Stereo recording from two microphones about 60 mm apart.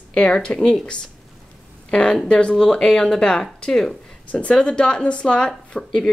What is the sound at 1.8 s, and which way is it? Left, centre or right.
Speech, centre.